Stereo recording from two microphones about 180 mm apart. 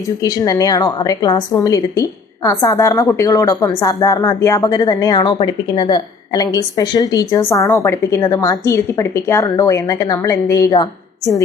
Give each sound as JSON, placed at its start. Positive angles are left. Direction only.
{"t": 0.2, "sound": "a woman's voice", "side_deg": 20}